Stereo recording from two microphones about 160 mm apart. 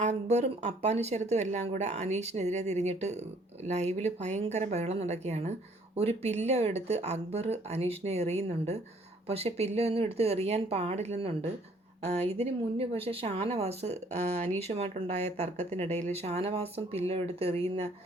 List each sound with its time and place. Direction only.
0.0 s speech: 45° right (ahead or behind)